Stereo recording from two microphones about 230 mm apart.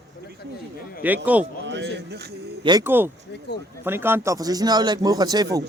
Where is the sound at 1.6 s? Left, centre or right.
Right.